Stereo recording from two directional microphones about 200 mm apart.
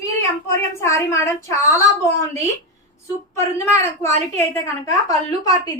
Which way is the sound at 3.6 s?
15° left (ahead or behind).